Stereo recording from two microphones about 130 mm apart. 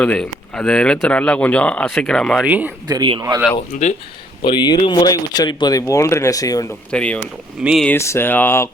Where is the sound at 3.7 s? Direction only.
70° left (ahead or behind).